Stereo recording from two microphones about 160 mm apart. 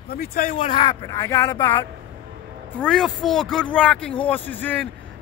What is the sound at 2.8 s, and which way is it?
Speech, 5° left (ahead or behind).